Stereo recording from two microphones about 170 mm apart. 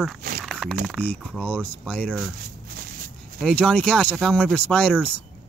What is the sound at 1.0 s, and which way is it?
Speech, 10° left (ahead or behind).